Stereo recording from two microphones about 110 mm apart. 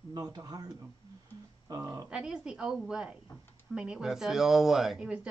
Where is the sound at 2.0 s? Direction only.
10° right (ahead or behind).